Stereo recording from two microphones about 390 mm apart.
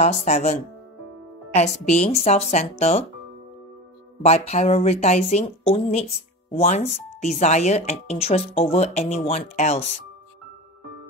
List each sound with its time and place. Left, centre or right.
0.0 s speech: centre
4.2 s speech: centre